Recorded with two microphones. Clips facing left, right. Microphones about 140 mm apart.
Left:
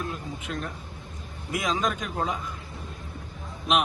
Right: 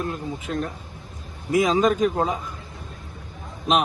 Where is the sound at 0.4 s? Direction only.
40° right (ahead or behind).